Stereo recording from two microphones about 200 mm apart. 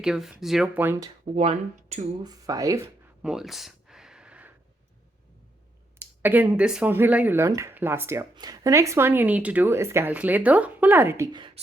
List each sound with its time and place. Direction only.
0.0 s speech: 5° right (ahead or behind)
1.2 s speech: 30° right (ahead or behind)
2.2 s a sound: 15° right (ahead or behind)
6.0 s speech: 10° right (ahead or behind)